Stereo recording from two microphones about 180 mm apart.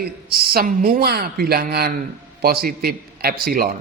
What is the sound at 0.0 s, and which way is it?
A man's voice, 60° right (ahead or behind).